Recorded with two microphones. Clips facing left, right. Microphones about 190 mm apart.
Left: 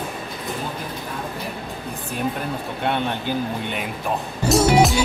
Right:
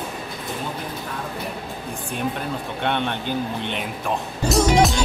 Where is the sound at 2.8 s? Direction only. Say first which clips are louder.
Left 1 dB; 5° left (ahead or behind).